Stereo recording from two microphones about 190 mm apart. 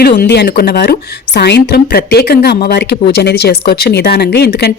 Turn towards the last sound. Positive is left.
turn(degrees=60)  # may be behind; listen again after turning